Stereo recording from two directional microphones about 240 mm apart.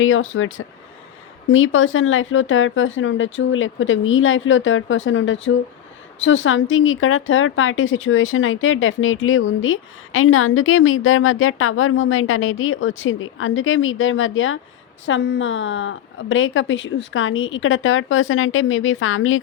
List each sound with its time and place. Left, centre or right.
0.0 s a woman's voice: left